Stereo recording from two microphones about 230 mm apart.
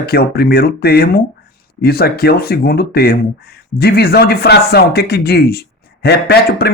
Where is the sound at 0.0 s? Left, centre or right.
Left.